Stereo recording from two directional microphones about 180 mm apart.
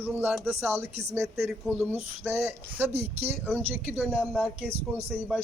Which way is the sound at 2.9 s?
35° right (ahead or behind).